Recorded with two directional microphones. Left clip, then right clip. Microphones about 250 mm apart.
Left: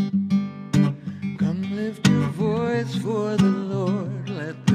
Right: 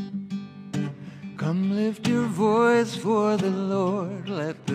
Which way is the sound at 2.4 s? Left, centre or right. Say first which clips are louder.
Right 7 dB; right.